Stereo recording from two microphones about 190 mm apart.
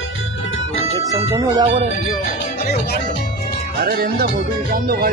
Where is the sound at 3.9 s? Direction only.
55° right (ahead or behind).